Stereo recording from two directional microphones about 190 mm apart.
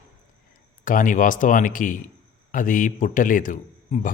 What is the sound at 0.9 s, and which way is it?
A man's voice, 45° left (ahead or behind).